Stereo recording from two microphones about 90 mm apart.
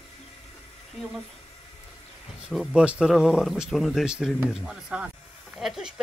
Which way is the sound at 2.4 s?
5° right (ahead or behind).